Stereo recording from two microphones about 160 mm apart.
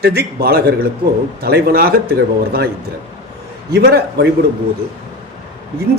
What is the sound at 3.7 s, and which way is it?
Speech, 90° right.